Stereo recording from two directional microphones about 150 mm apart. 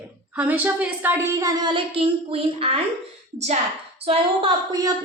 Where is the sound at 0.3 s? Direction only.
10° right (ahead or behind); by 3.6 s 45° right (ahead or behind).